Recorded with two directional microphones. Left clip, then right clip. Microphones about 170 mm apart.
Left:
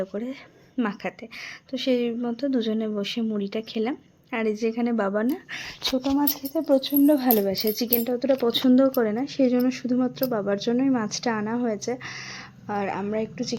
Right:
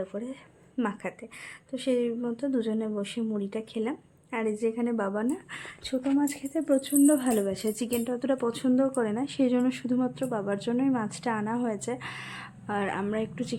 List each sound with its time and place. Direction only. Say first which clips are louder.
0.0 s a woman's voice: left 5 dB; 35° left (ahead or behind)
0.8 s a woman's voice: left 3 dB; 20° left (ahead or behind)
8.4 s a woman's voice: left 7 dB; 30° left (ahead or behind); by 13.4 s 5° left (ahead or behind)